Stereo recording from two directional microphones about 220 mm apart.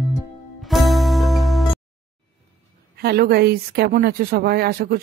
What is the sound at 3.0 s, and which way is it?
Speech, 45° right (ahead or behind).